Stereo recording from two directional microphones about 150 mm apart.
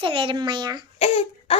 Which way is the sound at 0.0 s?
35° right (ahead or behind).